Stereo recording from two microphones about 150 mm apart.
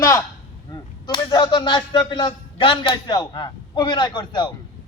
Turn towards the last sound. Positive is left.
turn(degrees=30)  # may be behind; listen again after turning